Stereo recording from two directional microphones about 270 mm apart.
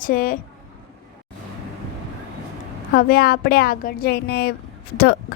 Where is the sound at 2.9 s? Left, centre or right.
Left.